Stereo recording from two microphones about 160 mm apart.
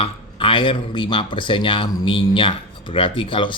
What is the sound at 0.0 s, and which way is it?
Speech, 35° left (ahead or behind).